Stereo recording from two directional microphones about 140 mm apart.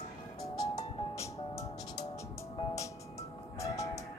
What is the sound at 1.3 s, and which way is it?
Music, 25° left (ahead or behind).